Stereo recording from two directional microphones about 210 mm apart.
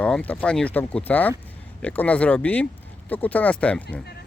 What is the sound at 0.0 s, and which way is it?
Speech, 5° left (ahead or behind).